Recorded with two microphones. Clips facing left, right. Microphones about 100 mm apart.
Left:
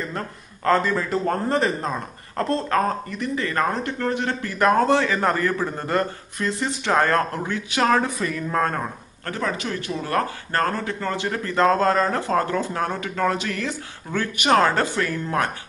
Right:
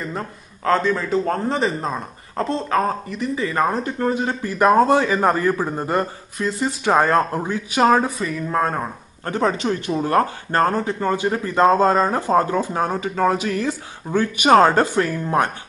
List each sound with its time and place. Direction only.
0.1 s a man's voice: centre (ahead or behind); by 6.0 s 20° right (ahead or behind)
6.3 s a man's voice: 5° right (ahead or behind)
8.2 s a man's voice: centre (ahead or behind)
9.2 s a man's voice: 25° right (ahead or behind)